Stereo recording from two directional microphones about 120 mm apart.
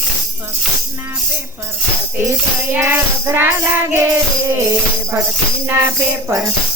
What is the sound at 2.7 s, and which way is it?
Music, 20° right (ahead or behind).